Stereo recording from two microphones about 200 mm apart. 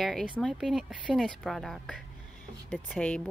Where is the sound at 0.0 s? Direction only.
Centre (ahead or behind).